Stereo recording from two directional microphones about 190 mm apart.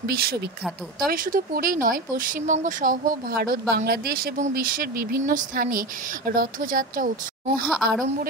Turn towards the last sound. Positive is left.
turn(degrees=0)  # may be behind; listen again after turning